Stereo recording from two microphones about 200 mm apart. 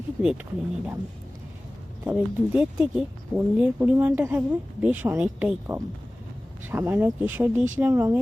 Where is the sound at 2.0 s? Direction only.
10° right (ahead or behind).